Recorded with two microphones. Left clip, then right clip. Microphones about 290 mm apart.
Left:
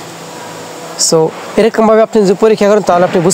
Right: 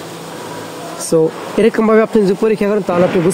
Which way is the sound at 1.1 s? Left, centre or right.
Left.